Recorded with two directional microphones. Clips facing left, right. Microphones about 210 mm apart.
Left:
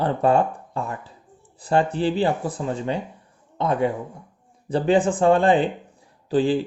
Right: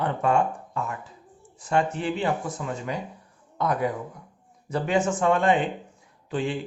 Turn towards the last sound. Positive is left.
turn(degrees=35)  # may be behind; listen again after turning